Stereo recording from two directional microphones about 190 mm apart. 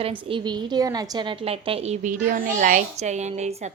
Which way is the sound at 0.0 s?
25° right (ahead or behind).